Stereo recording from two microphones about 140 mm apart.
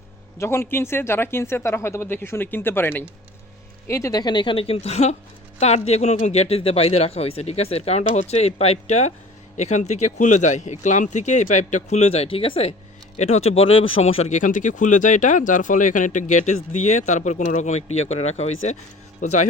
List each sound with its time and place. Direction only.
0.3 s a woman's voice: 20° left (ahead or behind); by 18.8 s 50° left (ahead or behind)
19.2 s speech: 60° left (ahead or behind)